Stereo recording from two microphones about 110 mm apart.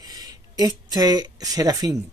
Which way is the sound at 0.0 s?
35° right (ahead or behind).